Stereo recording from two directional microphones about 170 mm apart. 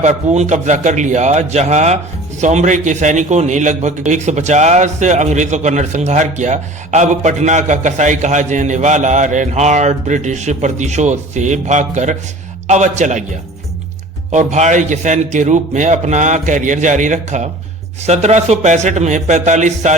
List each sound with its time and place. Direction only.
0.0 s a man's voice: 40° right (ahead or behind)
14.3 s a man's voice: 45° right (ahead or behind)